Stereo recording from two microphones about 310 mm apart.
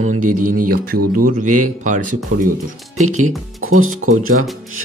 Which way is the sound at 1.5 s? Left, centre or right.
Right.